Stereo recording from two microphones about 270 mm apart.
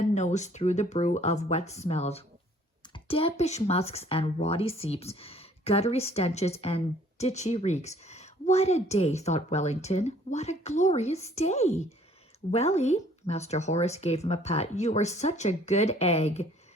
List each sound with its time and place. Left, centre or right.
0.0 s speech: left